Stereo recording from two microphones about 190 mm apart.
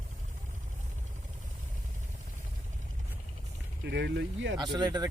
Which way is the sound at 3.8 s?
65° right (ahead or behind).